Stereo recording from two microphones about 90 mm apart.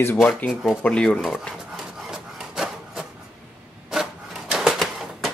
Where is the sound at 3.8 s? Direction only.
5° right (ahead or behind).